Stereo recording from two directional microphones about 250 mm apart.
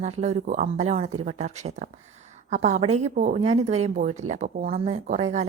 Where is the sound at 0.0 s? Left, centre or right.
Right.